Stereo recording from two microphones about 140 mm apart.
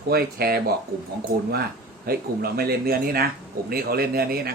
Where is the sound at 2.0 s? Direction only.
90° right.